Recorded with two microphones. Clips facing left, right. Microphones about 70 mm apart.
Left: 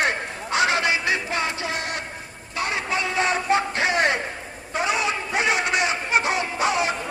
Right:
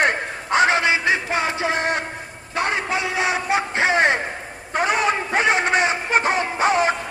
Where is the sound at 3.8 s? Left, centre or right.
Right.